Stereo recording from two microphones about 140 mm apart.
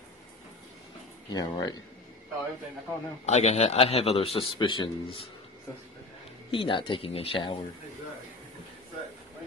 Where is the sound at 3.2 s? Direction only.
55° left (ahead or behind); by 5.2 s 35° left (ahead or behind).